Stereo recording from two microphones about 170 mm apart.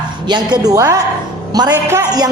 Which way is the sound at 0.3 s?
25° right (ahead or behind).